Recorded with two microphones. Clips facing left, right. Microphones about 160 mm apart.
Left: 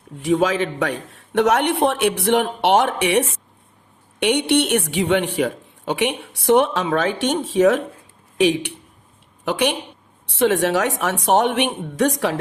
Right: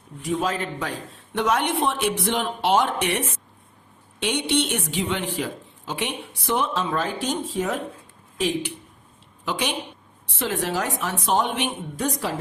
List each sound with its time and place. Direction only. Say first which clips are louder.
0.2 s speech: left 7 dB; 75° left (ahead or behind)